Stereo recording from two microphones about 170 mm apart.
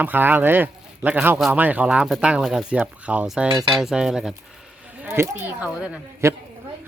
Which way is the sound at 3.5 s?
30° right (ahead or behind).